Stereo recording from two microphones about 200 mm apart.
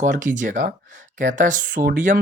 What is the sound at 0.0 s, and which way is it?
Speech, 40° right (ahead or behind).